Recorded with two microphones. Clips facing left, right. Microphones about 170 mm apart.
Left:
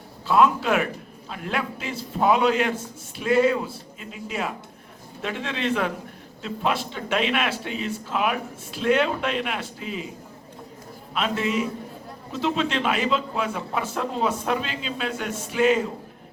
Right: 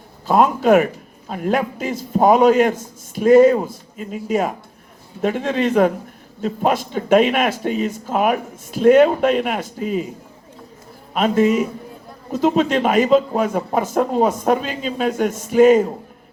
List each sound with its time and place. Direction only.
0.3 s a man's voice: 45° right (ahead or behind)
11.1 s a man's voice: 45° right (ahead or behind)